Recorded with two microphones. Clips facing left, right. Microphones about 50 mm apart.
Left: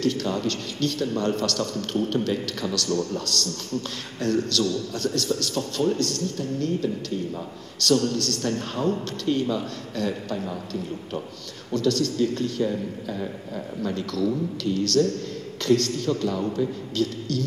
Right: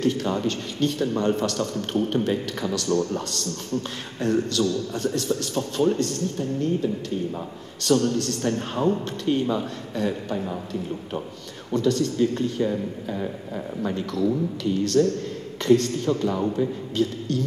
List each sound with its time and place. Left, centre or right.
0.0 s a man's voice: right